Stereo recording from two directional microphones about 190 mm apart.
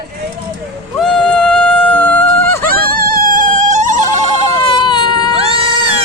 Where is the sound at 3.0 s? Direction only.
50° right (ahead or behind).